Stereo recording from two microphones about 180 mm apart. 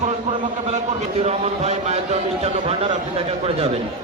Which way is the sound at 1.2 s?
35° right (ahead or behind).